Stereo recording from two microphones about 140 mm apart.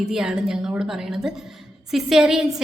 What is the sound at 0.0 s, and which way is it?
A woman's voice, 5° right (ahead or behind).